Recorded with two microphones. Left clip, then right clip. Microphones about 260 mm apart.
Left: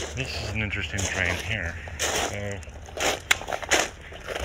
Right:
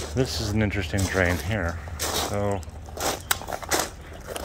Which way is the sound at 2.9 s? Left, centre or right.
Left.